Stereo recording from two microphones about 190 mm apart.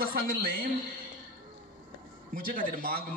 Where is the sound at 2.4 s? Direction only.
50° right (ahead or behind).